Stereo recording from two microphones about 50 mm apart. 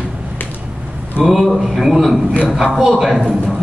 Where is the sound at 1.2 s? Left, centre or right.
Centre.